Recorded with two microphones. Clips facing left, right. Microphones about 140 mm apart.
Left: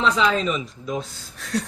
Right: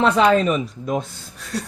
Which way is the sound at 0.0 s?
55° right (ahead or behind).